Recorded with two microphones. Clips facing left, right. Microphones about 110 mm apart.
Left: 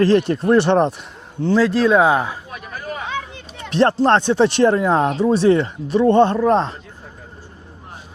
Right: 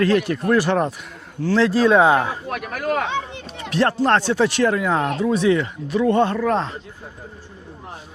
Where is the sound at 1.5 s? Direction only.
Centre (ahead or behind).